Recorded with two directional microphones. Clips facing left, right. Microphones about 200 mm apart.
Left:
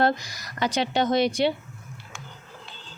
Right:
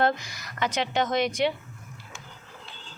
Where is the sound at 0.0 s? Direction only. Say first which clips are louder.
Left 2 dB; 35° left (ahead or behind).